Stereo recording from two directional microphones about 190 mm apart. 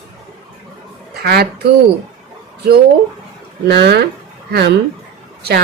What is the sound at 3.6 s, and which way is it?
A woman's voice, 60° right (ahead or behind).